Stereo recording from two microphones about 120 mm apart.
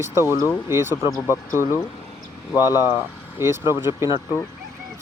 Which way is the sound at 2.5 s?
20° right (ahead or behind).